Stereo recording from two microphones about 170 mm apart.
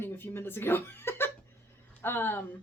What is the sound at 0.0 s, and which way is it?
Speech, 15° left (ahead or behind).